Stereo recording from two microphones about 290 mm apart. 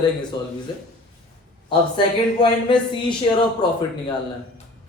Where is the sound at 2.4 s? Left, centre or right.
Centre.